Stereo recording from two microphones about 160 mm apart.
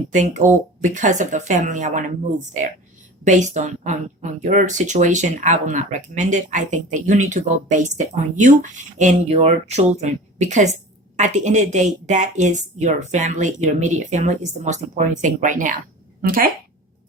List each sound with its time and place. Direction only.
0.1 s speech: 50° right (ahead or behind)